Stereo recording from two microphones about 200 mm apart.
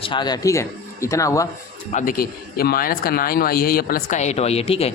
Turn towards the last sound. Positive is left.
turn(degrees=30)  # may be behind; listen again after turning